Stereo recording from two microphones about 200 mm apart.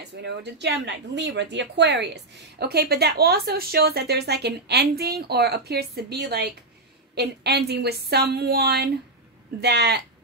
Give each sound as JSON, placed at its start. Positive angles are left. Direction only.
{"t": 0.1, "sound": "a woman's voice", "side_deg": -60}